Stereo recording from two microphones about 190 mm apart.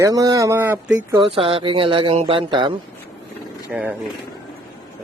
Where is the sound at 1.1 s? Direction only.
30° right (ahead or behind).